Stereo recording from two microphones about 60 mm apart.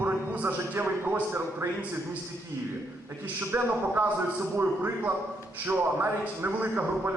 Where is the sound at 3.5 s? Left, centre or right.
Right.